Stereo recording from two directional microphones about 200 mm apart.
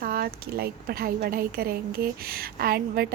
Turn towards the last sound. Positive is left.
turn(degrees=-50)  # may be behind; listen again after turning